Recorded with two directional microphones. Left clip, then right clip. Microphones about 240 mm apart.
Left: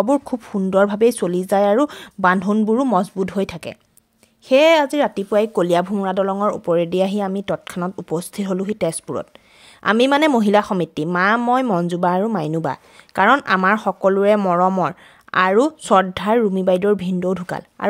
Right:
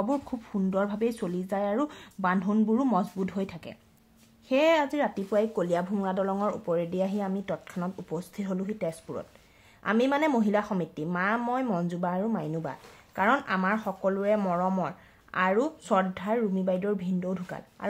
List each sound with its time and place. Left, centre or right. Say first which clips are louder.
0.0 s speech: left 12 dB; left